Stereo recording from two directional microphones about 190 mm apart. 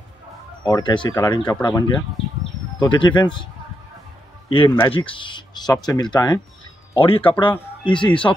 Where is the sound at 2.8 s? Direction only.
25° left (ahead or behind).